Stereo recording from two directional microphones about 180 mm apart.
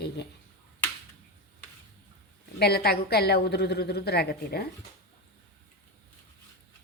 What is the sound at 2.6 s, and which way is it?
A woman's voice, 65° left (ahead or behind).